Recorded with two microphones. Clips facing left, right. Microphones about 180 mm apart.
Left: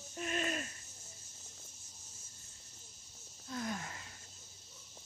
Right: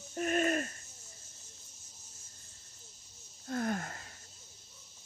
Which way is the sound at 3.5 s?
55° right (ahead or behind).